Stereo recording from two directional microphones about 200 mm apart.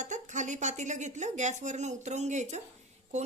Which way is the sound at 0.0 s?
40° right (ahead or behind).